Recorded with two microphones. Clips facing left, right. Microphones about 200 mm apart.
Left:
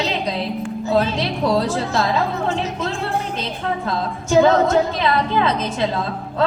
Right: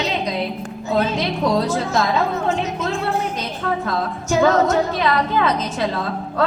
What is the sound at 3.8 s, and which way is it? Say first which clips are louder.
A woman's voice: even; 25° left (ahead or behind).